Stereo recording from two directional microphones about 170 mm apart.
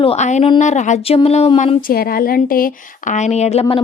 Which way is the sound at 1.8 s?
60° left (ahead or behind).